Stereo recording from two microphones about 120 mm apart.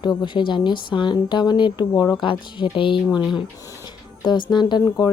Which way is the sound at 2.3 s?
45° left (ahead or behind).